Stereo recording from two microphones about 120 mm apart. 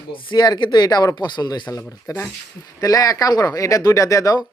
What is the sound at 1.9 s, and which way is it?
Speech, 25° left (ahead or behind).